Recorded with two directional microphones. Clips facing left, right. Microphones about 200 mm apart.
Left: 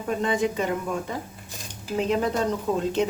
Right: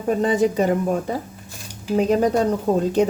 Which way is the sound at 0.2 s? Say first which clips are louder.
Right 6 dB; 40° right (ahead or behind).